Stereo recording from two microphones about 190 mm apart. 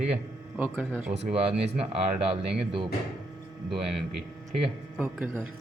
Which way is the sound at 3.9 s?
Centre (ahead or behind).